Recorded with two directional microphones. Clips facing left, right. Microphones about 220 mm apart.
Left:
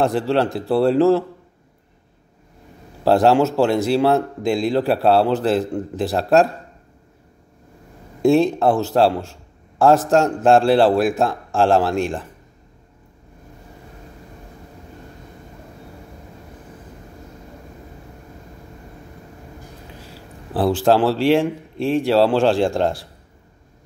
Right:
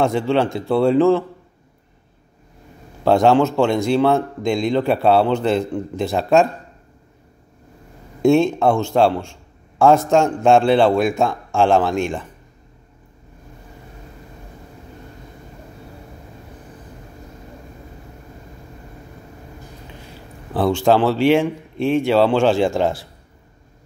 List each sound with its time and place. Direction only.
0.0 s a man's voice: centre (ahead or behind)
3.0 s a man's voice: centre (ahead or behind)
8.2 s a man's voice: centre (ahead or behind)
19.9 s speech: centre (ahead or behind)